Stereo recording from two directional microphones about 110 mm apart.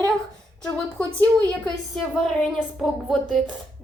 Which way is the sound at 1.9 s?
5° left (ahead or behind).